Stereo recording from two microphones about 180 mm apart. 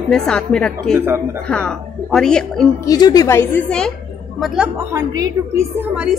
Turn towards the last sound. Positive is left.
turn(degrees=-15)  # may be behind; listen again after turning